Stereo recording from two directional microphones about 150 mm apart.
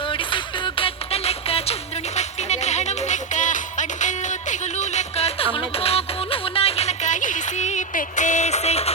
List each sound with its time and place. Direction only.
0.0 s music: 35° left (ahead or behind)